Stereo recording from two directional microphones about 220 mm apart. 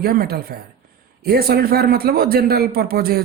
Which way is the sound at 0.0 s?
45° right (ahead or behind).